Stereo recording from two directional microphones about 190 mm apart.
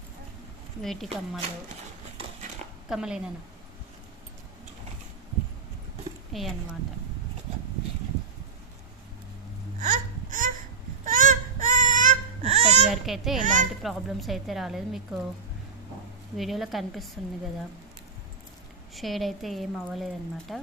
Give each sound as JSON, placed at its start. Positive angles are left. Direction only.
{"t": 0.8, "sound": "a woman's voice", "side_deg": 0}
{"t": 2.9, "sound": "a woman's voice", "side_deg": -5}
{"t": 6.3, "sound": "a woman's voice", "side_deg": 0}
{"t": 9.8, "sound": "baby cry", "side_deg": -40}
{"t": 11.0, "sound": "wail", "side_deg": -45}
{"t": 12.9, "sound": "a woman's voice", "side_deg": 0}
{"t": 13.4, "sound": "a child's voice", "side_deg": -40}
{"t": 13.8, "sound": "a woman's voice", "side_deg": 0}
{"t": 16.4, "sound": "a woman's voice", "side_deg": 0}
{"t": 18.9, "sound": "a woman's voice", "side_deg": 0}